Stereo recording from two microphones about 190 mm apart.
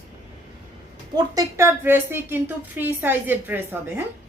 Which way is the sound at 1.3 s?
15° right (ahead or behind).